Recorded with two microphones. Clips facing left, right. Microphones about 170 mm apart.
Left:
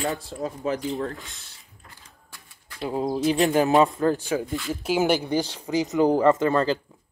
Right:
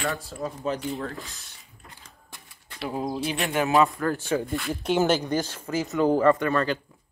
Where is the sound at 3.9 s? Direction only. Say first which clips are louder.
Left 3 dB; 20° left (ahead or behind).